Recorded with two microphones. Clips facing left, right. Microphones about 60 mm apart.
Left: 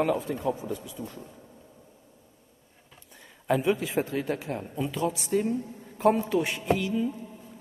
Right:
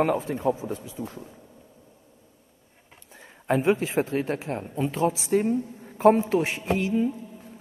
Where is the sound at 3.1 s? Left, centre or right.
Right.